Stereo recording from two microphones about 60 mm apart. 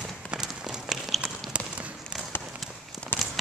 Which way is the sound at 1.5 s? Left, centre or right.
Right.